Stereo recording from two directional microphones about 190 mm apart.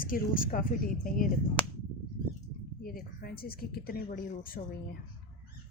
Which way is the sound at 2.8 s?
50° left (ahead or behind).